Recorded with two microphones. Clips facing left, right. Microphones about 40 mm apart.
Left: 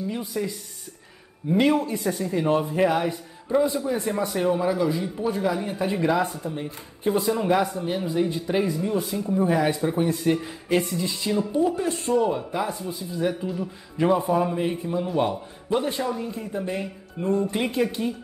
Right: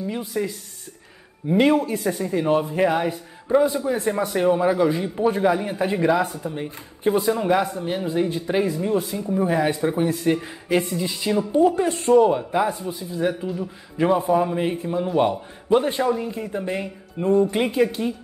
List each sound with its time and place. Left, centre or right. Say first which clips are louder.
0.1 s a man's voice: right 2 dB; centre; by 12.3 s right
12.3 s speech: right 5 dB; right
12.8 s speech: right 2 dB; centre
14.5 s speech: right 2 dB; centre